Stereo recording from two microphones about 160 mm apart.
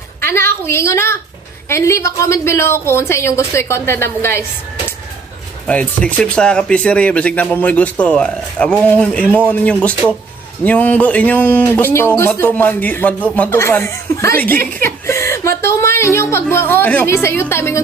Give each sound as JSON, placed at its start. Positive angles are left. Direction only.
{"t": 0.2, "sound": "a woman's voice", "side_deg": 15}
{"t": 5.7, "sound": "a woman's voice", "side_deg": 10}